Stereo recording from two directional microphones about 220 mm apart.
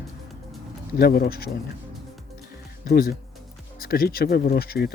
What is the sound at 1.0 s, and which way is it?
Speech, 45° left (ahead or behind).